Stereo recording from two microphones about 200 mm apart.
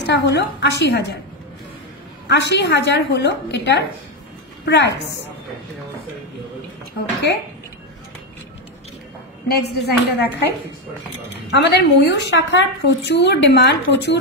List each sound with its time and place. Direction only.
0.0 s a woman's voice: 60° left (ahead or behind)
2.2 s a woman's voice: 60° left (ahead or behind)
9.6 s speech: 55° left (ahead or behind)
11.5 s a woman's voice: 60° left (ahead or behind)